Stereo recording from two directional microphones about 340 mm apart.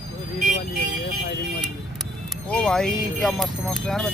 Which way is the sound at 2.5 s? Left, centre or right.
Centre.